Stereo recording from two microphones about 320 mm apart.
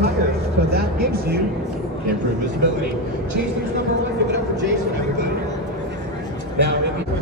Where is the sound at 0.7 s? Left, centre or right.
Right.